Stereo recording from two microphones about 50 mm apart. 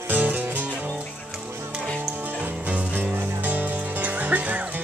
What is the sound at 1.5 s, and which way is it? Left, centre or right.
Music, right.